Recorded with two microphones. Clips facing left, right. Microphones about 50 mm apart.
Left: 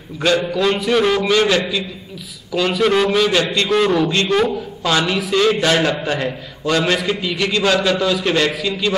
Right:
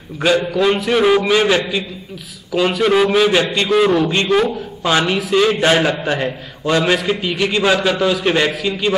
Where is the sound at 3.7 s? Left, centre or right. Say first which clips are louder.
Right 3 dB; centre.